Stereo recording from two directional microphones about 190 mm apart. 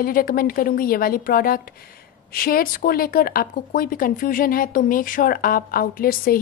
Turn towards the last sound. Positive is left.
turn(degrees=50)  # may be behind; listen again after turning